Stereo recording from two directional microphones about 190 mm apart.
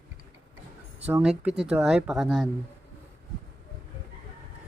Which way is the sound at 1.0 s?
5° right (ahead or behind).